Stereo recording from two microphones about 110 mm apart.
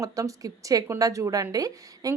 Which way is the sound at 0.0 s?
30° right (ahead or behind).